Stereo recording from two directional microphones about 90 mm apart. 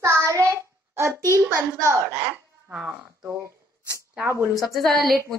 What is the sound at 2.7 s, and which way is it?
Speech, 10° right (ahead or behind).